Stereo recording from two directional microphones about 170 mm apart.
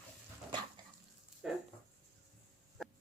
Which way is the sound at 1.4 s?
5° right (ahead or behind).